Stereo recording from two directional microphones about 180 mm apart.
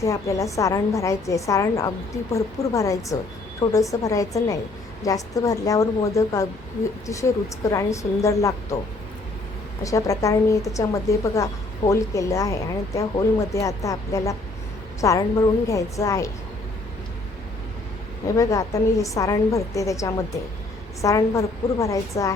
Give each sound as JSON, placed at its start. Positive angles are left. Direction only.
{"t": 0.0, "sound": "a woman's voice", "side_deg": 15}
{"t": 9.8, "sound": "a woman's voice", "side_deg": 15}
{"t": 18.3, "sound": "a woman's voice", "side_deg": 20}